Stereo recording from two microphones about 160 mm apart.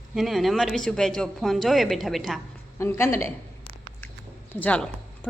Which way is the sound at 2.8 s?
15° left (ahead or behind).